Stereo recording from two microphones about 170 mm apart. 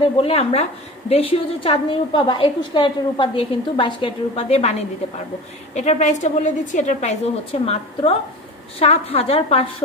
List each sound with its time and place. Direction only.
0.0 s a woman's voice: 35° left (ahead or behind)
7.6 s a woman's voice: 35° left (ahead or behind)